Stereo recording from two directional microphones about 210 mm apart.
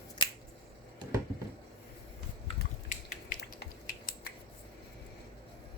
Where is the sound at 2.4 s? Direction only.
35° left (ahead or behind).